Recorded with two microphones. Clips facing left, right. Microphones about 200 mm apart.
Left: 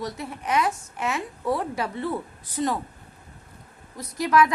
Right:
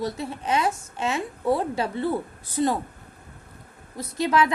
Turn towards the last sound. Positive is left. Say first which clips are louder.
# left 1 dB
turn(degrees=-25)  # may be behind; listen again after turning